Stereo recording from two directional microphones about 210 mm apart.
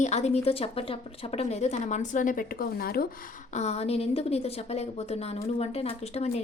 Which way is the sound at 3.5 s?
30° left (ahead or behind).